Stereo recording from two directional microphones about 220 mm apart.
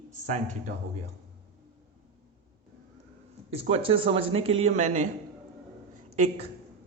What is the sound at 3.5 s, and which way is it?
A man's voice, 25° right (ahead or behind).